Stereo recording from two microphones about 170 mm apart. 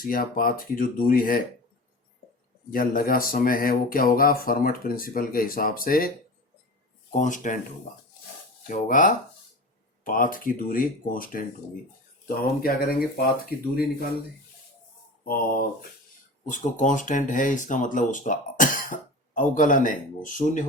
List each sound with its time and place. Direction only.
0.0 s speech: 55° left (ahead or behind)
2.6 s speech: 60° left (ahead or behind)
7.1 s speech: 50° left (ahead or behind)
8.6 s speech: 50° left (ahead or behind)
16.5 s speech: 50° left (ahead or behind)